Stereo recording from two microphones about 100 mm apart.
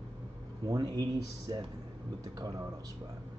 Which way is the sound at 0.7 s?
40° right (ahead or behind).